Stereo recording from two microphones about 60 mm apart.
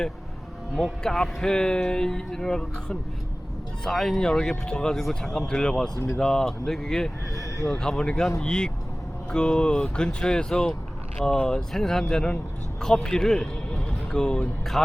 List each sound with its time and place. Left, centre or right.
1.0 s speech: centre
7.3 s speech: left
7.7 s speech: centre